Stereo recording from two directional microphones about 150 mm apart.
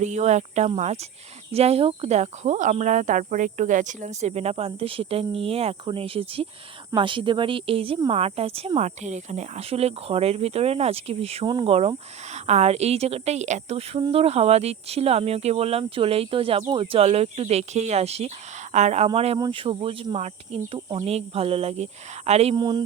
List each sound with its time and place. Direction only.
0.0 s speech: 50° right (ahead or behind)
22.5 s speech: 30° right (ahead or behind)